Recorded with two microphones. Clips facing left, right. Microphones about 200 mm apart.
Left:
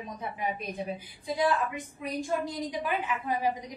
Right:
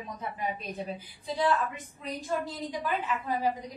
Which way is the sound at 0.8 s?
15° left (ahead or behind).